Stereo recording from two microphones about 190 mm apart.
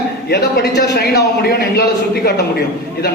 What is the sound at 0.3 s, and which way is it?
Speech, 60° left (ahead or behind).